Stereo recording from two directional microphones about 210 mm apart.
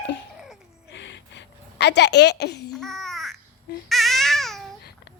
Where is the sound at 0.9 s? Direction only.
60° left (ahead or behind).